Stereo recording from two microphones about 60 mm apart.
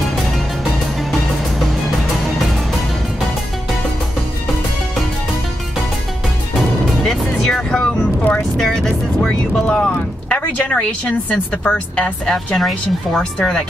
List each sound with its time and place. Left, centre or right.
1.7 s music: centre
7.0 s music: centre
8.4 s vehicle: centre
11.6 s speech: centre
12.5 s a woman's voice: centre